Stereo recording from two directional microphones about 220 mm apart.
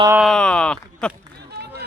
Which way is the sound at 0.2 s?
Centre (ahead or behind).